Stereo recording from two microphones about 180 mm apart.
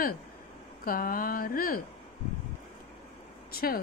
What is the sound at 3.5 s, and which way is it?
Speech, 55° left (ahead or behind).